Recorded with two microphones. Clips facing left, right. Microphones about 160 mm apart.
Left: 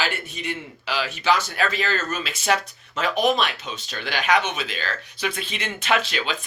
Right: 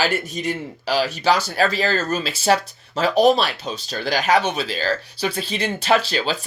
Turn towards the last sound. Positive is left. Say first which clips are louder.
# right 5 dB
turn(degrees=-35)  # may be behind; listen again after turning